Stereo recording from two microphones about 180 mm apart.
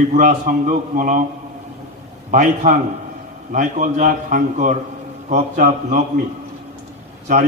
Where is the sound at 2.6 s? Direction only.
55° right (ahead or behind).